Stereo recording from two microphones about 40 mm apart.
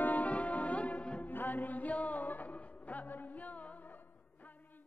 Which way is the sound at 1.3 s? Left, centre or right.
Left.